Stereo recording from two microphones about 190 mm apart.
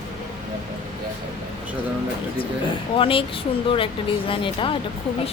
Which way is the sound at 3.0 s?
30° left (ahead or behind).